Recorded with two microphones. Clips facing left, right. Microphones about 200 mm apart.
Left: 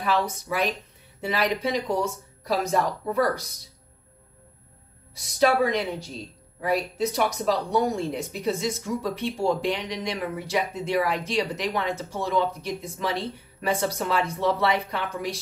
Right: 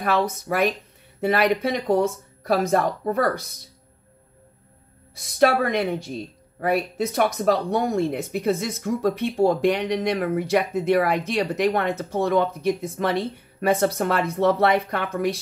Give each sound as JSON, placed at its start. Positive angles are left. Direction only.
{"t": 0.5, "sound": "a woman's voice", "side_deg": -55}
{"t": 5.1, "sound": "a woman's voice", "side_deg": -55}